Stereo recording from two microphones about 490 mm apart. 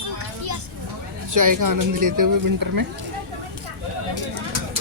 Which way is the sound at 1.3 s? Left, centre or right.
Right.